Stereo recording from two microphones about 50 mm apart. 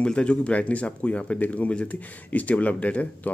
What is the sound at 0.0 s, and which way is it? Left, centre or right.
Speech, left.